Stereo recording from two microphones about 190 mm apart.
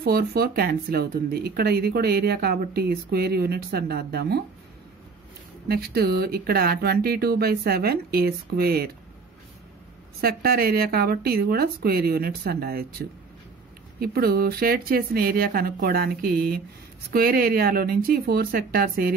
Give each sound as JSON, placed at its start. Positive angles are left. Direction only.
{"t": 0.0, "sound": "speech", "side_deg": -55}
{"t": 5.7, "sound": "speech", "side_deg": -55}
{"t": 10.2, "sound": "speech", "side_deg": -50}
{"t": 13.9, "sound": "speech", "side_deg": -55}